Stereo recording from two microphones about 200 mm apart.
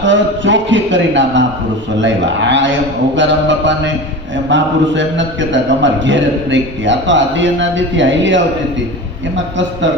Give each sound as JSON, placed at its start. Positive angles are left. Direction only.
{"t": 0.0, "sound": "a man's voice", "side_deg": -65}